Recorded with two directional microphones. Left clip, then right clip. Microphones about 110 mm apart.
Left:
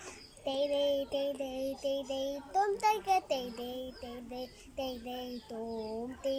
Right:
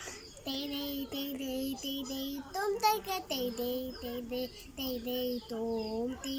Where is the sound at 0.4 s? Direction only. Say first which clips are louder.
Left 8 dB; 20° left (ahead or behind).